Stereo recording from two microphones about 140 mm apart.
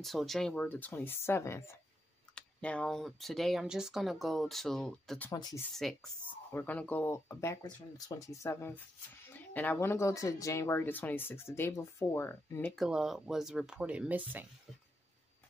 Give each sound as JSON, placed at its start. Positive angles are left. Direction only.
{"t": 0.0, "sound": "speech", "side_deg": 0}
{"t": 2.3, "sound": "speech", "side_deg": 10}
{"t": 5.3, "sound": "speech", "side_deg": 25}
{"t": 5.8, "sound": "speech", "side_deg": 0}
{"t": 12.7, "sound": "speech", "side_deg": -5}